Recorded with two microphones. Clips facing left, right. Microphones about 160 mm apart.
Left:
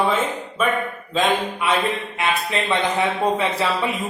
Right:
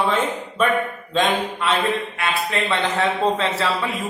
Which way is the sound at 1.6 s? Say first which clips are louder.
Right 1 dB; 15° left (ahead or behind).